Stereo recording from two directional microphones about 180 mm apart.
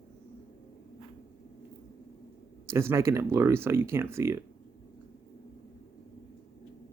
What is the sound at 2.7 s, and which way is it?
Speech, 15° right (ahead or behind).